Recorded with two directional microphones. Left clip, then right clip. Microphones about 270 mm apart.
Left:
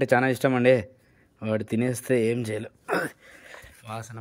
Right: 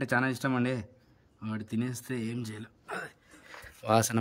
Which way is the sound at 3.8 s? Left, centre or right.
Right.